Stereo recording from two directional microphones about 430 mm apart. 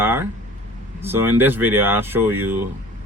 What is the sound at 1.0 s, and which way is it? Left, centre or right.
Speech, centre.